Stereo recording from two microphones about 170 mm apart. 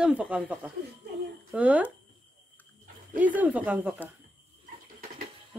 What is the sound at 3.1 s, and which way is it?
Speech, 10° right (ahead or behind).